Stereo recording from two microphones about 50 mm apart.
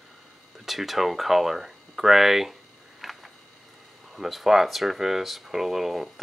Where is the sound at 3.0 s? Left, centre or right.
Centre.